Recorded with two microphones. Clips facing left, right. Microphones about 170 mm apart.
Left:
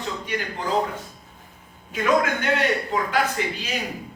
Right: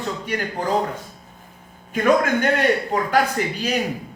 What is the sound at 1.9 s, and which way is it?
A man's voice, 50° right (ahead or behind).